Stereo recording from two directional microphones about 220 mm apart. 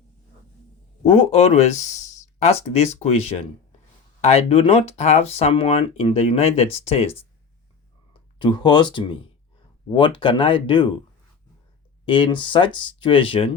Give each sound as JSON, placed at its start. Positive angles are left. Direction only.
{"t": 1.0, "sound": "speech", "side_deg": 25}
{"t": 8.4, "sound": "speech", "side_deg": 20}
{"t": 12.0, "sound": "speech", "side_deg": 20}